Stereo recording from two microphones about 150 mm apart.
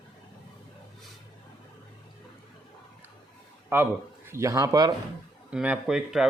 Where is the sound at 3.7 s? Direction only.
15° right (ahead or behind).